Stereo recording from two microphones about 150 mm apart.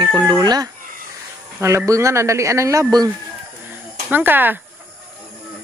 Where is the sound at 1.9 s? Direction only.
20° right (ahead or behind).